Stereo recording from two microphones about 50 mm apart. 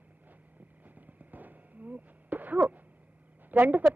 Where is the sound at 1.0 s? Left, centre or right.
Right.